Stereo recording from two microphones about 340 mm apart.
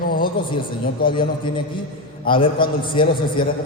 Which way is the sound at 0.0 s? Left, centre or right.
Left.